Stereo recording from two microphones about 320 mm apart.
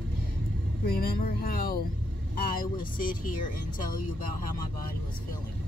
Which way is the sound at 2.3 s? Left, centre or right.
Left.